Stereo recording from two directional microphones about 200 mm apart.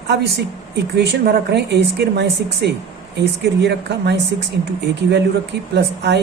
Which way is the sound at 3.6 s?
55° right (ahead or behind).